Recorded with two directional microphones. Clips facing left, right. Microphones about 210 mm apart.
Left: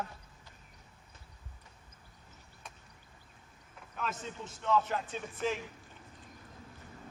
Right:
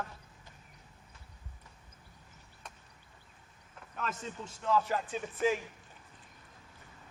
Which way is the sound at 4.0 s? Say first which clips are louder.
Even; 5° left (ahead or behind).